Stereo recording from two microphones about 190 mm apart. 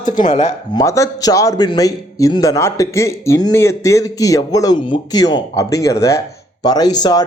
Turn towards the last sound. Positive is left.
turn(degrees=20)  # may be behind; listen again after turning